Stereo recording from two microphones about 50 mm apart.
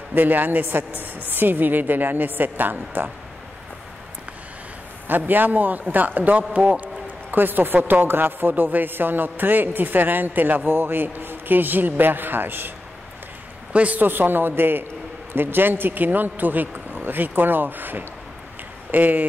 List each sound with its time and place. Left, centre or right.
0.1 s speech: right
5.0 s speech: right
13.7 s a man's voice: right
14.0 s speech: right